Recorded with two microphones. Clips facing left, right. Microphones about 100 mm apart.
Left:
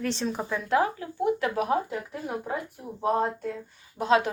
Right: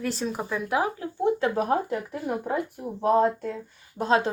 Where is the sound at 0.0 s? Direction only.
5° right (ahead or behind).